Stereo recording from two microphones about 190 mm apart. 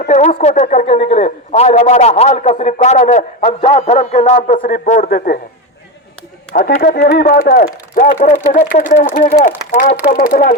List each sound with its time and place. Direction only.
0.0 s a man's voice: 40° left (ahead or behind)
6.5 s a man's voice: 45° left (ahead or behind)
10.1 s speech: 50° left (ahead or behind)